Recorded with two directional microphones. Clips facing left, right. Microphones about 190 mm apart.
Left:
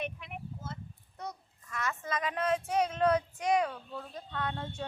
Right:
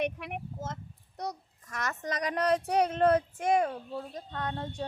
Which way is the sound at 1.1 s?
40° right (ahead or behind).